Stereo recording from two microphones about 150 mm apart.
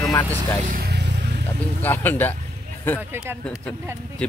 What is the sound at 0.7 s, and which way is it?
Vehicle, 85° right.